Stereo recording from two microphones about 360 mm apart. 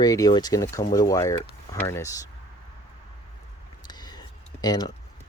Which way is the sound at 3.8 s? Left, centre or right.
Centre.